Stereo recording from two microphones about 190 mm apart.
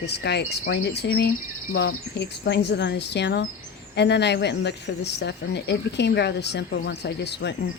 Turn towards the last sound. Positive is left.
turn(degrees=65)  # may be behind; listen again after turning